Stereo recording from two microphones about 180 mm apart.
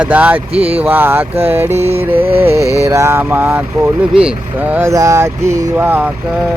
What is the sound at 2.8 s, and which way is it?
Speech, 15° right (ahead or behind).